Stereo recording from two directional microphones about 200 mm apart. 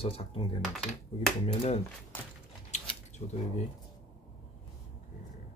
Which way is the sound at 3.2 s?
30° left (ahead or behind).